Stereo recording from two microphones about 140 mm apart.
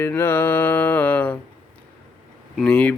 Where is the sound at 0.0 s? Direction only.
15° left (ahead or behind).